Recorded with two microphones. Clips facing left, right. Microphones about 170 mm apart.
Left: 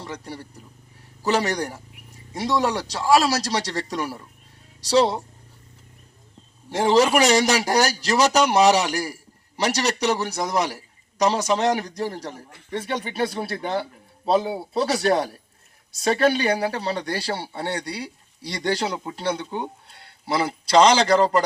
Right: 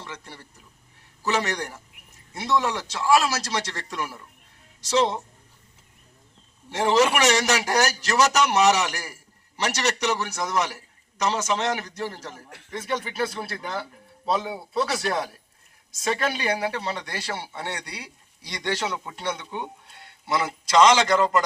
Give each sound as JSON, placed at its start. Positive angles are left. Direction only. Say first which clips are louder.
{"t": 0.0, "sound": "speech", "louder": "left 6 dB", "side_deg": 35}
{"t": 6.7, "sound": "speech", "louder": "left 3 dB", "side_deg": 35}